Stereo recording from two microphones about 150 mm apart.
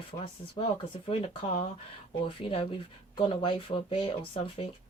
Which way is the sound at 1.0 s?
35° left (ahead or behind).